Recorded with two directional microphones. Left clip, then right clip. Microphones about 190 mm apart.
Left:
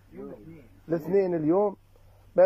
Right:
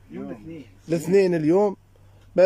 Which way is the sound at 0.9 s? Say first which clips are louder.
Right 5 dB; 25° right (ahead or behind).